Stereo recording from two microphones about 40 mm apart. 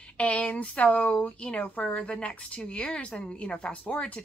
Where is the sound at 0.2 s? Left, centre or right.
Left.